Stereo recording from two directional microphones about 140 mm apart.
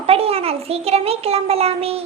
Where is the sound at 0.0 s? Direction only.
45° right (ahead or behind).